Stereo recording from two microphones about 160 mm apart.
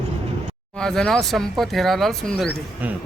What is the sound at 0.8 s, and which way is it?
Speech, 5° left (ahead or behind).